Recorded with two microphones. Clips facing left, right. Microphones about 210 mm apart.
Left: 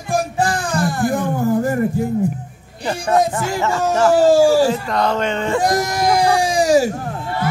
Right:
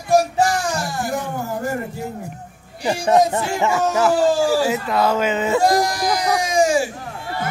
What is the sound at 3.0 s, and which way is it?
Speech, 25° right (ahead or behind).